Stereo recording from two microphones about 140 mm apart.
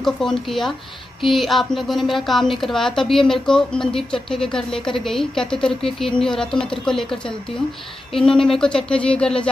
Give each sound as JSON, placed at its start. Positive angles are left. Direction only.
{"t": 0.0, "sound": "a woman's voice", "side_deg": 5}